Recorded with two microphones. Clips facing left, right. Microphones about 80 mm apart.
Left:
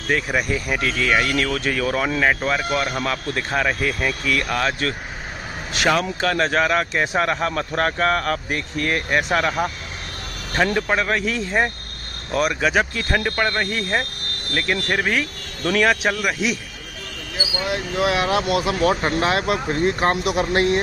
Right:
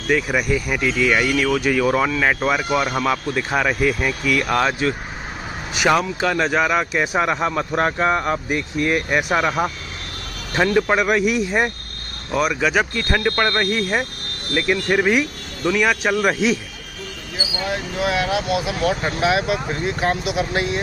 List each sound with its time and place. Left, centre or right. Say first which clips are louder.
0.1 s speech: right 2 dB; centre
1.8 s speech: right 3 dB; centre
12.3 s speech: right 1 dB; centre
15.8 s speech: left 1 dB; centre
18.2 s speech: left 1 dB; left